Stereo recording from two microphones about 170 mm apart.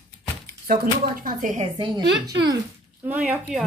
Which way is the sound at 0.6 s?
55° right (ahead or behind).